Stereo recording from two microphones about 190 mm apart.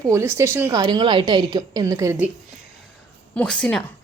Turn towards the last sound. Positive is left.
turn(degrees=5)  # may be behind; listen again after turning